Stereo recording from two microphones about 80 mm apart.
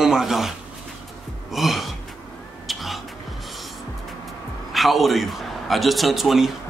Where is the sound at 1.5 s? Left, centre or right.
Centre.